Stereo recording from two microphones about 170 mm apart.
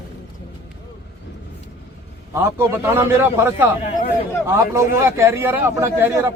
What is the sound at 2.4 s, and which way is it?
A man's voice, 15° right (ahead or behind).